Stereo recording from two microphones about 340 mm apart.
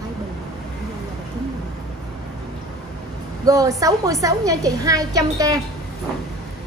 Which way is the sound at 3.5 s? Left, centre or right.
Centre.